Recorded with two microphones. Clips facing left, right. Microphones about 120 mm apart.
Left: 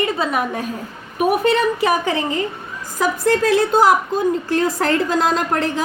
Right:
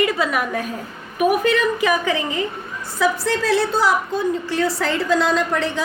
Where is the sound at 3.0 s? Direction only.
50° left (ahead or behind).